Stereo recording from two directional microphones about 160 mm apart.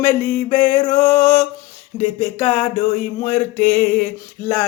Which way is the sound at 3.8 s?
55° left (ahead or behind).